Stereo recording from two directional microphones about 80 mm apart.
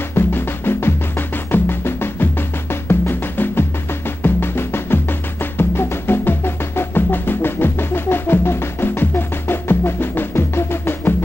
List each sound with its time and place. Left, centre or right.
0.1 s music: left
1.5 s drum: left
2.7 s music: left
4.2 s drum: left